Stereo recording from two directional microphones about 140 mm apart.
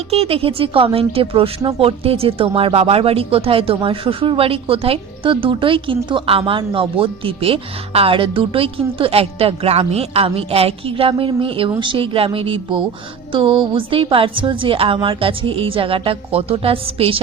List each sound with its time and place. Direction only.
0.1 s speech: 45° right (ahead or behind)